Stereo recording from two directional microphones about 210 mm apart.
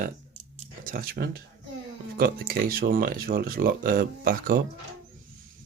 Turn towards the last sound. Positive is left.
turn(degrees=-45)  # may be behind; listen again after turning